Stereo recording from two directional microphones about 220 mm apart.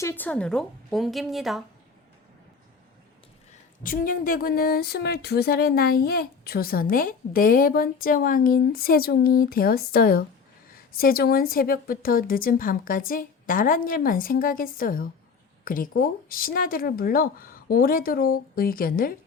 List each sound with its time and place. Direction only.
0.0 s a woman's voice: 10° left (ahead or behind)
3.8 s a woman's voice: 40° left (ahead or behind)